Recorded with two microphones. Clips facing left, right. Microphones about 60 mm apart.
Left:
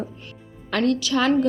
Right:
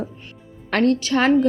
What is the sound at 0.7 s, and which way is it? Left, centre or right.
Speech, right.